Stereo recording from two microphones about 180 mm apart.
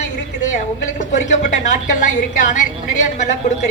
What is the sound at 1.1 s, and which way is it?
A woman's voice, 40° left (ahead or behind).